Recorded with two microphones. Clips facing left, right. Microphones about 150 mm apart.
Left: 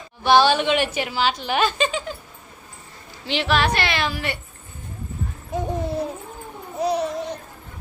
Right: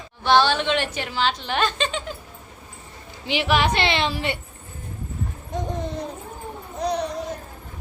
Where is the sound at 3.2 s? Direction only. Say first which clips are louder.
Even; 15° right (ahead or behind).